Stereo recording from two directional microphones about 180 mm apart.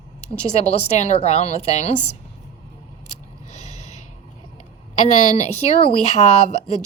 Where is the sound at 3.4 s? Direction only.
40° left (ahead or behind).